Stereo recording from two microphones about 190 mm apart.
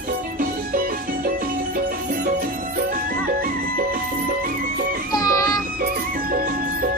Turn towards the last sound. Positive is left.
turn(degrees=20)  # may be behind; listen again after turning